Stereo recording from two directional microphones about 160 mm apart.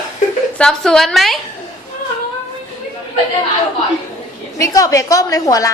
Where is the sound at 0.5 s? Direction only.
5° left (ahead or behind).